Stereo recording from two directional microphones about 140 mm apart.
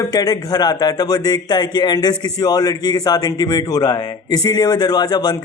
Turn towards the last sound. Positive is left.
turn(degrees=30)  # may be behind; listen again after turning